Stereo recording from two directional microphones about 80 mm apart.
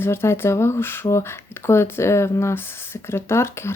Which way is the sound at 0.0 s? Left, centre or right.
Left.